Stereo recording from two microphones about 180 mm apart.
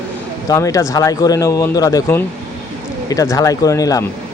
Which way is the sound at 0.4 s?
20° left (ahead or behind).